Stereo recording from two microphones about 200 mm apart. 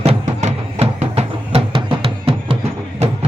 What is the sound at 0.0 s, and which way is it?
Music, 30° right (ahead or behind).